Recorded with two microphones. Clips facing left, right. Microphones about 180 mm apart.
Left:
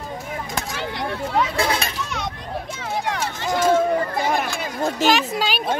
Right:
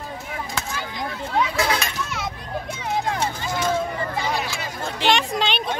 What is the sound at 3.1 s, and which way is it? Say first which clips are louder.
Run: left 1 dB; 70° left (ahead or behind).